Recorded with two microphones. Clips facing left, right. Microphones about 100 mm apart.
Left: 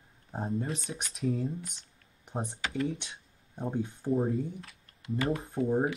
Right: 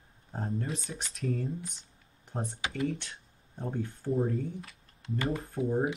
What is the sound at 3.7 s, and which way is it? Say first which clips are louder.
Speech: left 2 dB; 20° left (ahead or behind).